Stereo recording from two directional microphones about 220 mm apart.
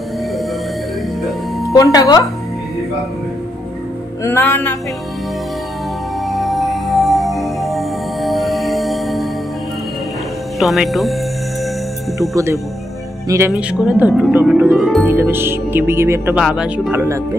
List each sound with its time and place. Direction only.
1.7 s speech: 15° left (ahead or behind)
4.2 s speech: 10° left (ahead or behind)
6.2 s music: centre (ahead or behind)
10.6 s speech: centre (ahead or behind)
12.2 s speech: 15° right (ahead or behind)